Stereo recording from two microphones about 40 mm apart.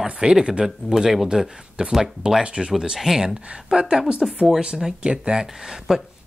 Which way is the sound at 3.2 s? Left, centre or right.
Right.